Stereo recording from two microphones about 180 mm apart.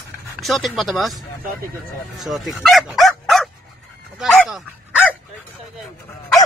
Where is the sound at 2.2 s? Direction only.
Centre (ahead or behind).